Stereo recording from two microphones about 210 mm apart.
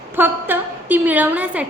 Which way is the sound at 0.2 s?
10° right (ahead or behind).